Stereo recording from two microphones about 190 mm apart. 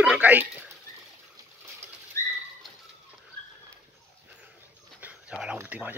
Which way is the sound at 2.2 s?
15° left (ahead or behind).